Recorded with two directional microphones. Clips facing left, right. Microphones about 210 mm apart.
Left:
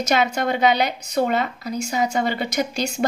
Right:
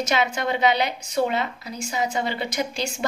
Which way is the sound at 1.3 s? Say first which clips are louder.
Left 4 dB; 45° left (ahead or behind).